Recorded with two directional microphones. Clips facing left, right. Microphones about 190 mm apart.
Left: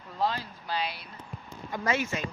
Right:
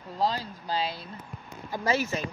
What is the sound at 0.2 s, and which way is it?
Speech, 35° right (ahead or behind).